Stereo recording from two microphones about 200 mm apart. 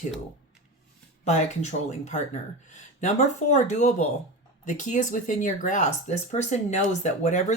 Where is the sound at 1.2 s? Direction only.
35° left (ahead or behind).